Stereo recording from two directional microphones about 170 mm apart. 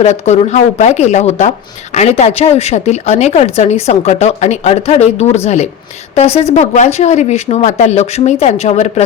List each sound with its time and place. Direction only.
0.0 s speech: 40° left (ahead or behind)